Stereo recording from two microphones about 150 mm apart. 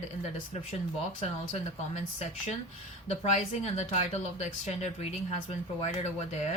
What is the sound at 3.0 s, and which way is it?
Speech, 45° left (ahead or behind).